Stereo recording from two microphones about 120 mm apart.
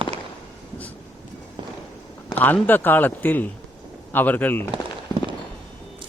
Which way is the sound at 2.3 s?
15° left (ahead or behind).